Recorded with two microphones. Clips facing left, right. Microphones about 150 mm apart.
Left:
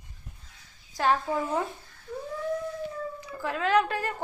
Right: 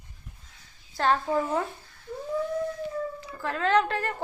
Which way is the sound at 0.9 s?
10° left (ahead or behind).